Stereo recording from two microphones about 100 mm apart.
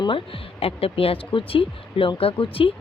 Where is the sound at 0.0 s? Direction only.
60° left (ahead or behind).